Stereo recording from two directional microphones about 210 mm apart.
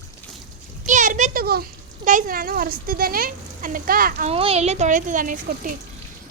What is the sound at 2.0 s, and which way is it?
Speech, 40° right (ahead or behind).